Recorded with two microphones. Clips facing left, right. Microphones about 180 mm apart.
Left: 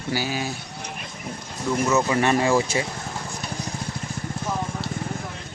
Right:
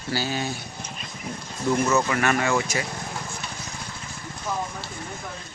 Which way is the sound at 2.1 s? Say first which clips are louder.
Left 3 dB; 30° left (ahead or behind).